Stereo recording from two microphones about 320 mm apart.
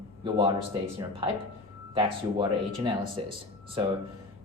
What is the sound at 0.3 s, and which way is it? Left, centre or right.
Speech, centre.